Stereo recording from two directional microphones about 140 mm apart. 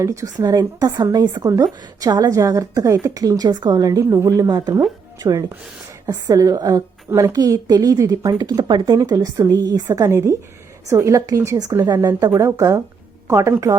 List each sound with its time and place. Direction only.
0.0 s speech: 20° right (ahead or behind)